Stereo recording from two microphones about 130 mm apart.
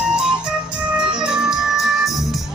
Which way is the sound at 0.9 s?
5° right (ahead or behind).